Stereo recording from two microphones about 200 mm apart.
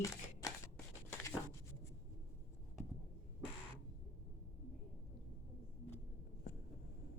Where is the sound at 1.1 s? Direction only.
10° left (ahead or behind).